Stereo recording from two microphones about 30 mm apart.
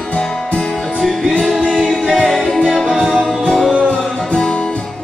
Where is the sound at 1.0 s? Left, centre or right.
Centre.